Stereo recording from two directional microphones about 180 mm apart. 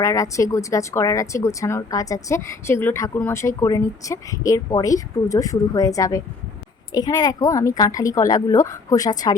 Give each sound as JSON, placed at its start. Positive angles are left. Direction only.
{"t": 0.0, "sound": "a woman's voice", "side_deg": 15}